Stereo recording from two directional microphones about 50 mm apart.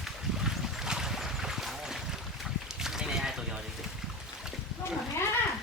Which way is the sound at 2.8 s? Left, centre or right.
Centre.